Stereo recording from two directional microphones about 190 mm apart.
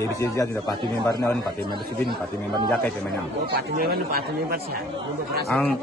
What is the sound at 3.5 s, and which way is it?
Speech, 55° right (ahead or behind).